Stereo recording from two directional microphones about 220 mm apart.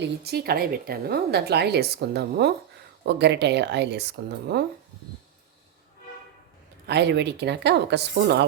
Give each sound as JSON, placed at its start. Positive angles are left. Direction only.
{"t": 0.0, "sound": "speech", "side_deg": -45}
{"t": 6.8, "sound": "speech", "side_deg": -50}